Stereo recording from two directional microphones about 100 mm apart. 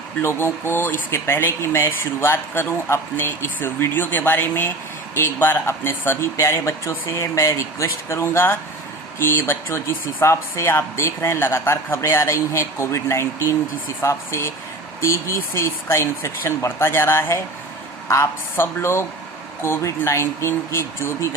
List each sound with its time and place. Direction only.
0.2 s speech: 25° left (ahead or behind)